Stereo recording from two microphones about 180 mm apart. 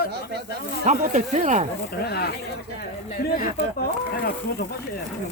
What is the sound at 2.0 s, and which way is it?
Speech, 60° left (ahead or behind).